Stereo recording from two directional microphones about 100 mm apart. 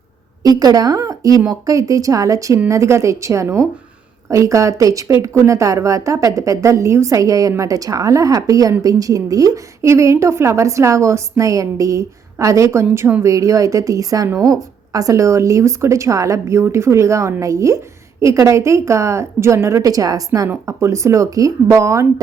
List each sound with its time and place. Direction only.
0.4 s a woman's voice: 40° right (ahead or behind)